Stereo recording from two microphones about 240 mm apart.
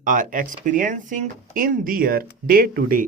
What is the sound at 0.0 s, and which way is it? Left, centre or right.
Speech, right.